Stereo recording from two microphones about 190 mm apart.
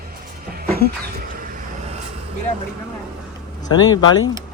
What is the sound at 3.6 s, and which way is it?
Speech, 20° left (ahead or behind).